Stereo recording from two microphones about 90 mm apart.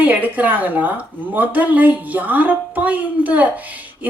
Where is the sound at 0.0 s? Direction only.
20° right (ahead or behind).